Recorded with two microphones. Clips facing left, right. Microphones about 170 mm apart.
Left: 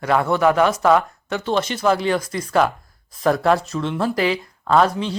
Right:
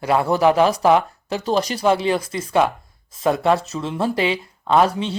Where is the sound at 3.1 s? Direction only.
Centre (ahead or behind).